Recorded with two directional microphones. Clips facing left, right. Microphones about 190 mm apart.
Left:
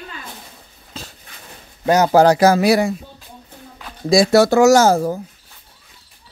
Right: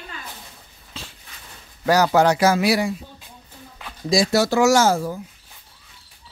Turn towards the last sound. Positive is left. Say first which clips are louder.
# left 5 dB
turn(degrees=40)  # may be behind; listen again after turning